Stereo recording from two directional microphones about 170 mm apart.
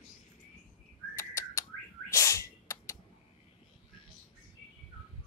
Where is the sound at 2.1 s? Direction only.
15° left (ahead or behind).